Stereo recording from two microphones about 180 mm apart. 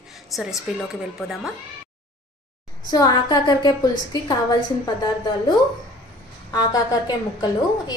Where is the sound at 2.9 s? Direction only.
25° left (ahead or behind).